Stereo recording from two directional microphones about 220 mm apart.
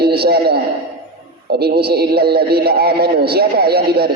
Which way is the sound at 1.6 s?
45° right (ahead or behind).